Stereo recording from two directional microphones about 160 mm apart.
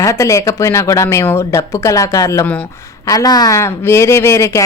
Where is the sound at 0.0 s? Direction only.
20° left (ahead or behind).